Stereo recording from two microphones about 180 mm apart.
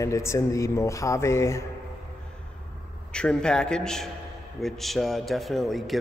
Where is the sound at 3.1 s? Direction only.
5° left (ahead or behind).